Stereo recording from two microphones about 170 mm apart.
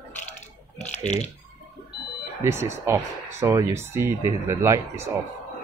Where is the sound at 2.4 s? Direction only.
15° right (ahead or behind).